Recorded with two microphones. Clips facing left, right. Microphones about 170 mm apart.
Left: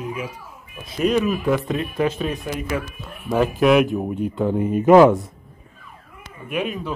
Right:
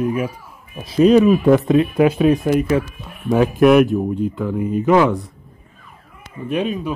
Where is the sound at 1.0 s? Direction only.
35° right (ahead or behind).